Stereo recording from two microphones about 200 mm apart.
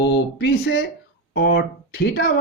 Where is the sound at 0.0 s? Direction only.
55° left (ahead or behind).